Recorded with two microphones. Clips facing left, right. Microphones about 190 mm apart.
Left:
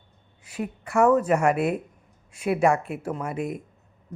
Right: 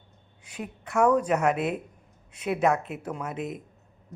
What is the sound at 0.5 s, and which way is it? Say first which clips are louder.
Speech: left 4 dB; 5° left (ahead or behind).